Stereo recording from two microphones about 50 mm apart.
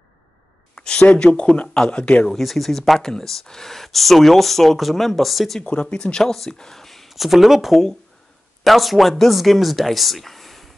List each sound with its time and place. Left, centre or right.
0.7 s speech: centre
2.2 s speech: centre
5.6 s speech: left; by 10.7 s centre